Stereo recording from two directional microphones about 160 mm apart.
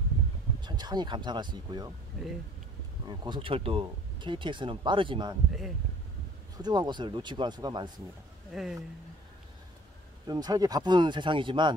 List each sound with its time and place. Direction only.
0.7 s speech: 25° right (ahead or behind)
2.2 s speech: centre (ahead or behind)
3.1 s speech: 30° right (ahead or behind)
6.5 s speech: 25° right (ahead or behind)
8.5 s speech: centre (ahead or behind)
10.2 s speech: 25° right (ahead or behind)